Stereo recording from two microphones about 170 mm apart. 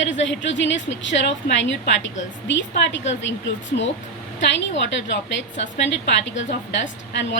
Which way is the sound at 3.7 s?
60° left (ahead or behind).